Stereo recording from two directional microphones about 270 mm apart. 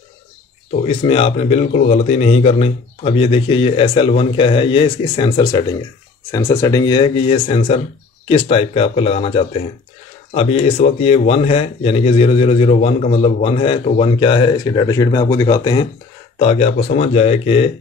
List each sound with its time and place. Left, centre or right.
0.8 s speech: left